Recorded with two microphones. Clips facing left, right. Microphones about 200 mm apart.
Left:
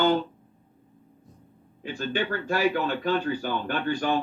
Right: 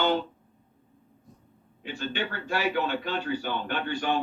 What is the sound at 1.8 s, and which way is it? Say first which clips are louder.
Speech: left 3 dB; 45° left (ahead or behind).